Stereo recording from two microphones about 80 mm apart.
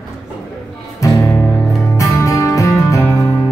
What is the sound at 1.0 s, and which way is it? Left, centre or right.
Music, left.